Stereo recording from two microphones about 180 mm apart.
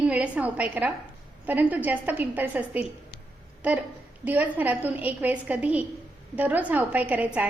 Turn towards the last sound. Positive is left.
turn(degrees=-10)  # may be behind; listen again after turning